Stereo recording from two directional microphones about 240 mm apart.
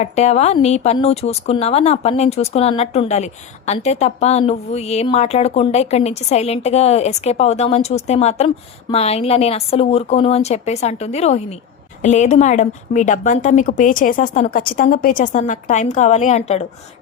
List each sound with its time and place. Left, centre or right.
0.0 s a woman's voice: left